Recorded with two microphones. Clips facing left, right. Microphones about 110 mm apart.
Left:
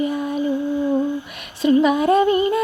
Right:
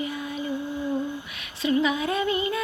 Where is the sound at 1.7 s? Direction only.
50° left (ahead or behind).